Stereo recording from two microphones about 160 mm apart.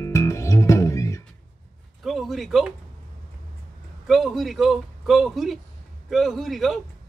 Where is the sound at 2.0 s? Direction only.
Centre (ahead or behind).